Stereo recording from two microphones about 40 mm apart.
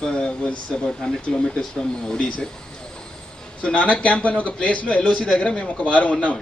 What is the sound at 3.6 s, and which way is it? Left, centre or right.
A man's voice, left.